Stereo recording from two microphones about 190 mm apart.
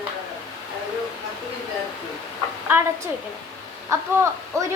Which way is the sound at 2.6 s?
10° right (ahead or behind).